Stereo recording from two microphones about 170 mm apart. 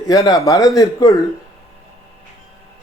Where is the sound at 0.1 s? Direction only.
20° left (ahead or behind).